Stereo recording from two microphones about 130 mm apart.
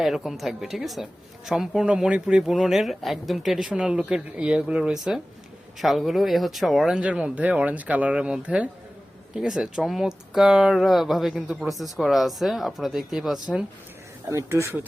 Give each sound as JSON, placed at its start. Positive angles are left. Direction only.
{"t": 0.0, "sound": "speech", "side_deg": 0}
{"t": 14.3, "sound": "speech", "side_deg": -20}